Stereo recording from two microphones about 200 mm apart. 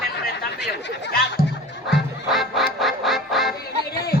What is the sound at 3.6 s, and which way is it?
Music, 50° left (ahead or behind).